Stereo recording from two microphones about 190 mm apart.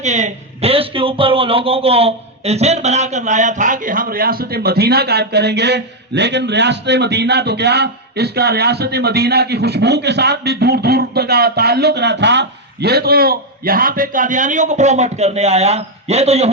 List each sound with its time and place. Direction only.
0.0 s speech: 40° right (ahead or behind)